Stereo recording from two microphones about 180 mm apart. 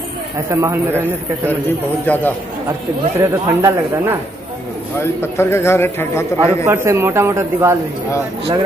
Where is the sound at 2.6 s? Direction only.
15° right (ahead or behind).